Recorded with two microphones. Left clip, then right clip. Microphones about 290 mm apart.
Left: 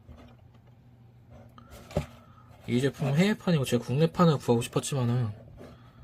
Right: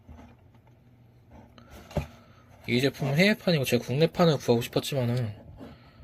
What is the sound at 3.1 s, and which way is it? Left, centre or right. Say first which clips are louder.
Speech: right 7 dB; centre.